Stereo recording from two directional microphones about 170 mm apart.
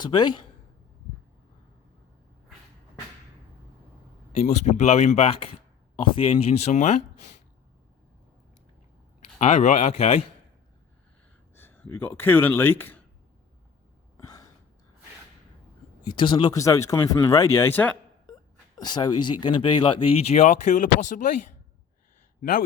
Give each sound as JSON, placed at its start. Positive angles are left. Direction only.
{"t": 0.0, "sound": "speech", "side_deg": 25}
{"t": 4.4, "sound": "speech", "side_deg": 45}
{"t": 9.4, "sound": "speech", "side_deg": 45}
{"t": 11.5, "sound": "speech", "side_deg": 10}
{"t": 14.2, "sound": "a sound", "side_deg": 20}
{"t": 16.0, "sound": "speech", "side_deg": 30}
{"t": 18.8, "sound": "speech", "side_deg": 25}